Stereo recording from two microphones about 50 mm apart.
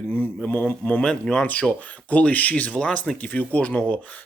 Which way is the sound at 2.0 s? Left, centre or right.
Left.